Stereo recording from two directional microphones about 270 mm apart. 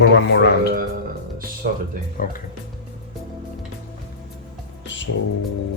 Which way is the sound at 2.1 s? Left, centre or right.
Left.